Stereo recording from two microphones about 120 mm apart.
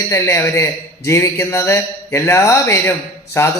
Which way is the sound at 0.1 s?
20° left (ahead or behind).